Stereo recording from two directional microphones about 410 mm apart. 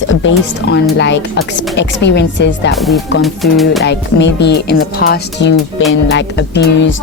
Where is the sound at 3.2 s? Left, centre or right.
Centre.